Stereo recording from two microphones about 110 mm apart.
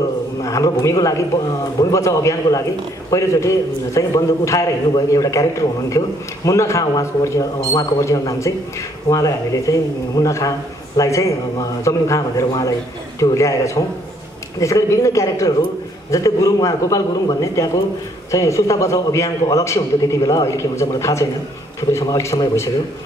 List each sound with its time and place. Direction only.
0.4 s a man's voice: 30° left (ahead or behind)